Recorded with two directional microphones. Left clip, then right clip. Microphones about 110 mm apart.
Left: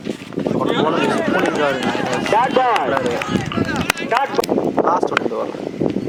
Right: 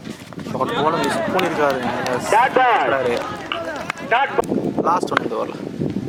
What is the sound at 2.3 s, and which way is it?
Speech, 50° right (ahead or behind).